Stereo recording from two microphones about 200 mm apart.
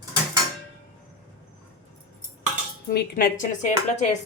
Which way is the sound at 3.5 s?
40° left (ahead or behind).